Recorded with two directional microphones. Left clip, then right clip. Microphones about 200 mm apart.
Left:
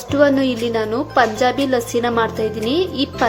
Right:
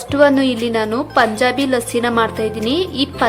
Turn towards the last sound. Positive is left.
turn(degrees=0)  # may be behind; listen again after turning